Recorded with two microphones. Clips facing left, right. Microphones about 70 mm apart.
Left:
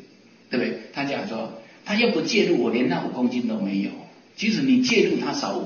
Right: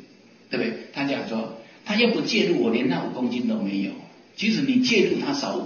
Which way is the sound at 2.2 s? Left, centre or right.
Centre.